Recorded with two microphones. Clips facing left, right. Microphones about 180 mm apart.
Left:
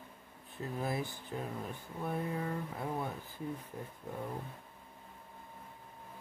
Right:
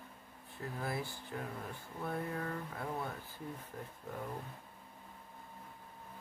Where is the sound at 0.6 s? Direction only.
20° left (ahead or behind).